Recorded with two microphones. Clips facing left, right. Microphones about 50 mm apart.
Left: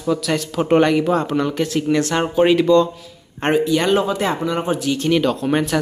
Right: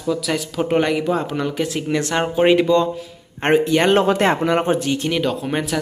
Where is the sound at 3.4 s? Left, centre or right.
Right.